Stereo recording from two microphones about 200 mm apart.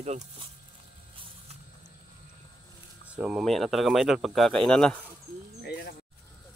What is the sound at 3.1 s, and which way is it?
Speech, 5° right (ahead or behind).